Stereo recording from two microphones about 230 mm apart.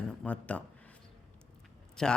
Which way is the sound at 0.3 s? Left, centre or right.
Centre.